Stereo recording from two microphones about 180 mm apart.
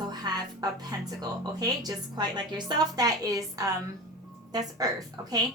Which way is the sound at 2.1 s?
25° right (ahead or behind).